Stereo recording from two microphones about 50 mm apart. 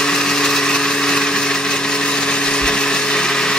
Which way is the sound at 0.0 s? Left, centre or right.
Centre.